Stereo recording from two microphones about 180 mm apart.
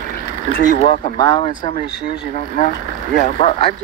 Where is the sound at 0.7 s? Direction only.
45° left (ahead or behind).